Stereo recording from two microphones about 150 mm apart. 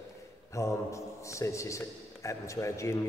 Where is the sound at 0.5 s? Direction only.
20° left (ahead or behind).